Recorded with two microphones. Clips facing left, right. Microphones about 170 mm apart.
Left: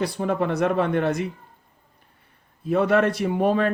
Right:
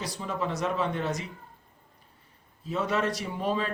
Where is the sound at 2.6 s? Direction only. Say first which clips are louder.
Left 9 dB; 60° left (ahead or behind).